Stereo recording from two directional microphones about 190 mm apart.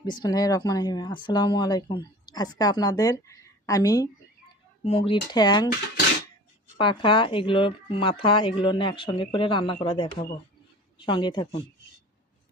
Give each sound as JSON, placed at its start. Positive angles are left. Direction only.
{"t": 0.0, "sound": "speech", "side_deg": 20}
{"t": 4.9, "sound": "speech", "side_deg": 30}
{"t": 6.7, "sound": "speech", "side_deg": 25}